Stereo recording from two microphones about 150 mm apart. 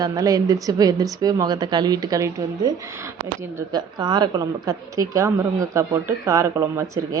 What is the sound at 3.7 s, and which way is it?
A woman's voice, 25° right (ahead or behind).